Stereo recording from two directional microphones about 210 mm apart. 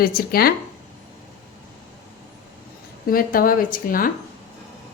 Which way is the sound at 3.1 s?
45° left (ahead or behind).